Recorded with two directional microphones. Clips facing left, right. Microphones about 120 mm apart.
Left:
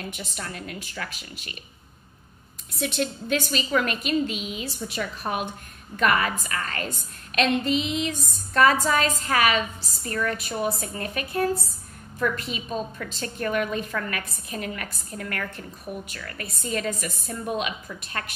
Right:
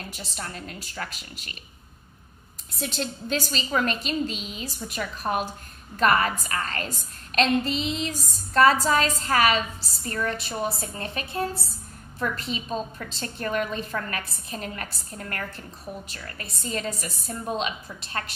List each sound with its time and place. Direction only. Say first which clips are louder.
0.1 s a woman's voice: left 1 dB; 35° right (ahead or behind)
2.8 s a woman's voice: left 3 dB; 30° right (ahead or behind)
4.8 s a woman's voice: right 2 dB; 45° right (ahead or behind)